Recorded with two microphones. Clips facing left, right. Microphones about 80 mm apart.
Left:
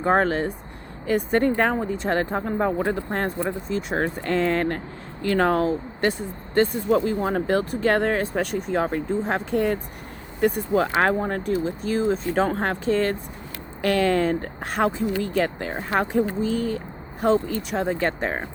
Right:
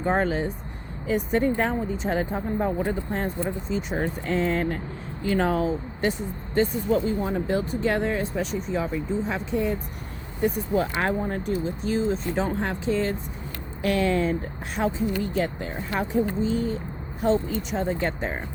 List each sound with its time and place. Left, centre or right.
0.0 s speech: left
11.8 s speech: left
14.8 s speech: left